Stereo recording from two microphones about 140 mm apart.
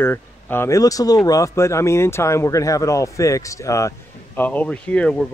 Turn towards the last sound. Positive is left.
turn(degrees=5)  # may be behind; listen again after turning